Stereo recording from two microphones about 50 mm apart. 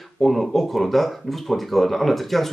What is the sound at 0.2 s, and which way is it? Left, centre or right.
Speech, centre.